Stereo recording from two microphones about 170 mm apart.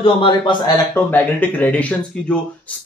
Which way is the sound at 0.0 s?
30° left (ahead or behind).